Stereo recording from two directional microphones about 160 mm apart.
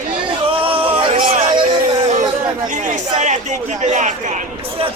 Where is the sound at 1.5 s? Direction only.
30° right (ahead or behind).